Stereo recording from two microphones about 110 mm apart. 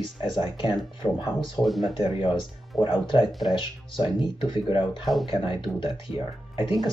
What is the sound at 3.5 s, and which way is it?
Speech, 45° left (ahead or behind).